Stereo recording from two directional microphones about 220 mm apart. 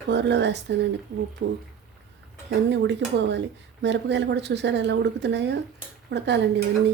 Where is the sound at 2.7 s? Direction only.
50° right (ahead or behind).